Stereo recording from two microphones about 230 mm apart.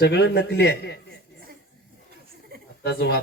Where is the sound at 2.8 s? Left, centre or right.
Left.